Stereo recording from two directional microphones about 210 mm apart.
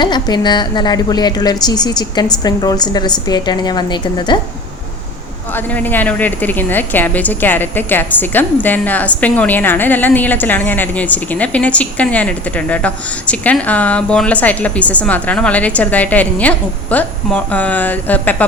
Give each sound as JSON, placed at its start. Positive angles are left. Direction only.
{"t": 0.0, "sound": "a woman's voice", "side_deg": 20}
{"t": 5.5, "sound": "speech", "side_deg": 10}